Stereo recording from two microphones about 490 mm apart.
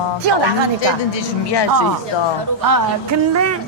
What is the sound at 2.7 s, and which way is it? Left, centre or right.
Music, right.